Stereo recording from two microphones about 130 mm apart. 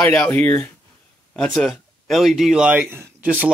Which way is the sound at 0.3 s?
15° left (ahead or behind).